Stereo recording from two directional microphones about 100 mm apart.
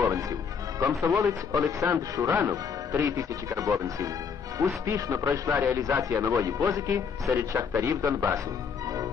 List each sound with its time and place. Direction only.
0.0 s music: 35° right (ahead or behind)
0.9 s a man's voice: 35° right (ahead or behind)